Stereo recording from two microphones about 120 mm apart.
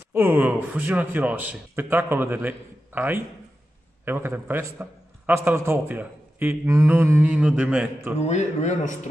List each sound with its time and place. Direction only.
0.1 s a man's voice: 15° right (ahead or behind)
8.2 s speech: 75° left (ahead or behind)